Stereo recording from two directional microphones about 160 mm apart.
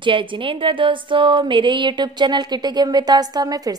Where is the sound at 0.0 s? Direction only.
30° right (ahead or behind).